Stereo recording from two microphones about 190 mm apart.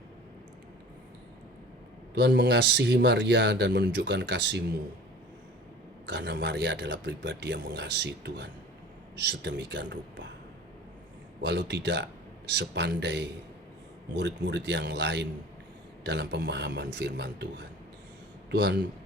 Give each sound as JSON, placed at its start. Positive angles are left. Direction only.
{"t": 2.1, "sound": "speech", "side_deg": -60}
{"t": 6.1, "sound": "speech", "side_deg": -65}
{"t": 11.4, "sound": "speech", "side_deg": -65}
{"t": 18.5, "sound": "speech", "side_deg": -65}